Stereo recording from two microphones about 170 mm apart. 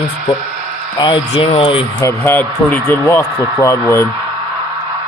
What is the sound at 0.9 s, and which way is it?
Speech, 25° left (ahead or behind).